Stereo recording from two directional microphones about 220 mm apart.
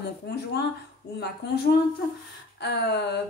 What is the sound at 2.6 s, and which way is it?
Speech, 50° left (ahead or behind).